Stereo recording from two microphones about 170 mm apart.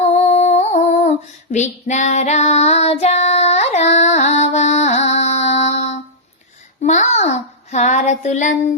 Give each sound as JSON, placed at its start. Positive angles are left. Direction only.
{"t": 0.0, "sound": "female singing", "side_deg": 40}
{"t": 6.8, "sound": "child singing", "side_deg": 45}